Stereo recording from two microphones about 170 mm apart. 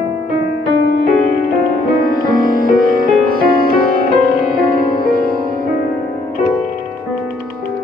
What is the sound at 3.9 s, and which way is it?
Music, 55° left (ahead or behind).